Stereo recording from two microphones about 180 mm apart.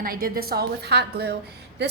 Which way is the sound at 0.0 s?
55° right (ahead or behind).